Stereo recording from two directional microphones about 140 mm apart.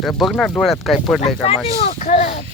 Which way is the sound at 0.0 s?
Centre (ahead or behind).